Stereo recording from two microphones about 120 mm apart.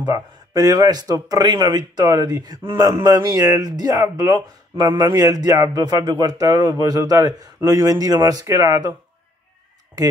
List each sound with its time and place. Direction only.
0.0 s speech: 30° right (ahead or behind)